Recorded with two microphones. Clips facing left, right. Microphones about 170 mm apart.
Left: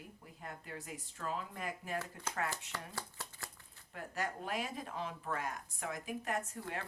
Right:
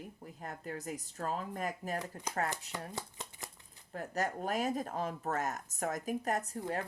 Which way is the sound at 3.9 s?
40° right (ahead or behind).